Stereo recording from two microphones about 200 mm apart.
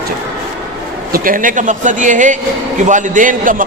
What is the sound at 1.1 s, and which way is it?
A man's voice, 45° right (ahead or behind).